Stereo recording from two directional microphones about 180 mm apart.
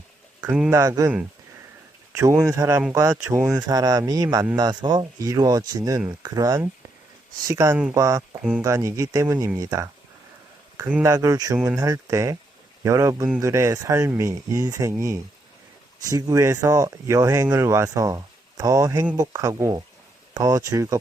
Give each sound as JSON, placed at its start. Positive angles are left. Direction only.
{"t": 0.7, "sound": "speech", "side_deg": -20}
{"t": 2.1, "sound": "speech", "side_deg": -15}